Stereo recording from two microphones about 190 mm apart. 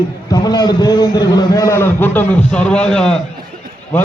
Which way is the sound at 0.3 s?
20° left (ahead or behind).